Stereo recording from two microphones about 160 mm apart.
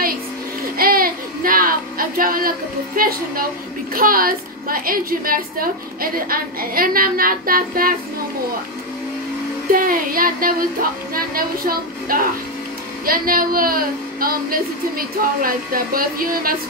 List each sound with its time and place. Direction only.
0.7 s a sound: 65° right (ahead or behind)
3.0 s a woman's voice: 65° right (ahead or behind)
9.7 s a woman's voice: 60° right (ahead or behind)